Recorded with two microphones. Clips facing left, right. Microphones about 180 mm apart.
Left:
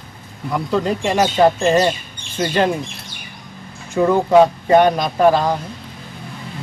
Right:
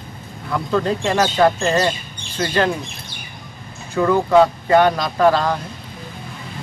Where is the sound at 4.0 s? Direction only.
20° left (ahead or behind).